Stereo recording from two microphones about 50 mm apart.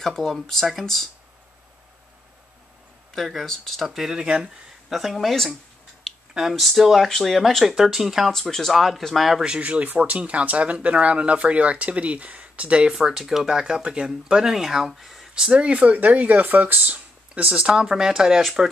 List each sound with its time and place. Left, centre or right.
0.0 s speech: centre
3.2 s speech: centre
4.2 s speech: centre
4.9 s speech: centre
8.3 s speech: centre
9.6 s speech: right
13.0 s speech: centre
15.5 s speech: right
17.6 s speech: right
17.8 s speech: centre